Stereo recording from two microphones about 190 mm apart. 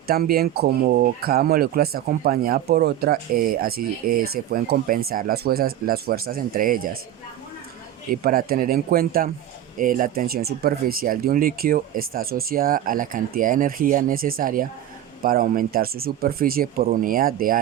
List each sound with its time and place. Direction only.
0.1 s speech: 55° right (ahead or behind)
8.1 s speech: 50° right (ahead or behind)